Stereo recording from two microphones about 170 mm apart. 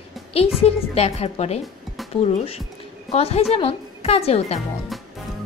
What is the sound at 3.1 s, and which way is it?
A woman's voice, 40° left (ahead or behind).